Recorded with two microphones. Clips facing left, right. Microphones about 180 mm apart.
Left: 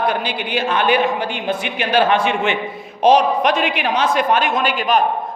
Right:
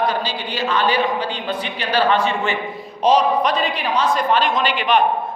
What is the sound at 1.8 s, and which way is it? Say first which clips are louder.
Speech: left 2 dB; 50° left (ahead or behind).